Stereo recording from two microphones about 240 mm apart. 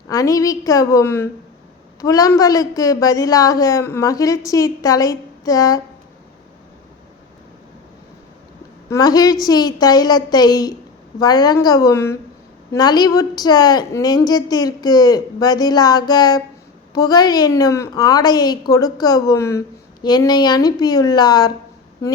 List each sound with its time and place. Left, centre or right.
0.1 s a woman's voice: centre
8.9 s a woman's voice: centre